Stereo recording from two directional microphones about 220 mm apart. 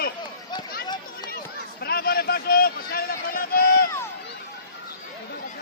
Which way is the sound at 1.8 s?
45° left (ahead or behind).